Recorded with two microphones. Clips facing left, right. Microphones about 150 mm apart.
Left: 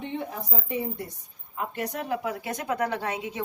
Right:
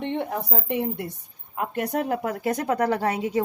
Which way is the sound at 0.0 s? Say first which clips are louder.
Right 6 dB; 65° right (ahead or behind).